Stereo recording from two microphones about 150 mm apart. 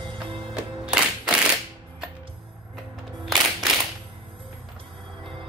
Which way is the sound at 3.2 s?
Centre (ahead or behind).